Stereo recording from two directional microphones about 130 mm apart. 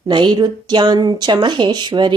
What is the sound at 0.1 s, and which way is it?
Speech, 35° right (ahead or behind).